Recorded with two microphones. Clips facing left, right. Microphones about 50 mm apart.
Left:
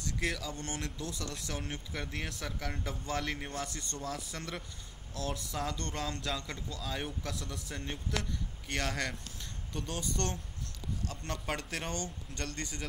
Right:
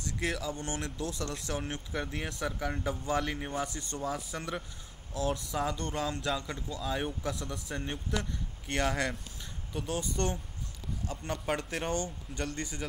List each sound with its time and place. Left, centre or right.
0.2 s a man's voice: centre